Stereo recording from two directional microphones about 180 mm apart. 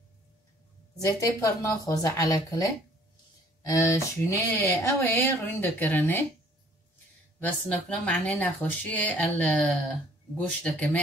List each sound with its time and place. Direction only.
0.9 s a woman's voice: 15° left (ahead or behind)
7.3 s speech: 10° left (ahead or behind)